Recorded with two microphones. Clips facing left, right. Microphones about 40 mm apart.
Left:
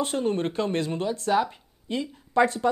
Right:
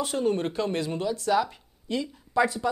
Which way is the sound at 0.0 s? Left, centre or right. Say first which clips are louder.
Even; left.